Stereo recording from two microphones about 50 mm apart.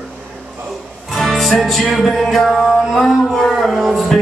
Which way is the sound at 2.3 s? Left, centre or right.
Centre.